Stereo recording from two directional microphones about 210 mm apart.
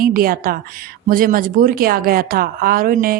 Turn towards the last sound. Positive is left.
turn(degrees=-40)  # may be behind; listen again after turning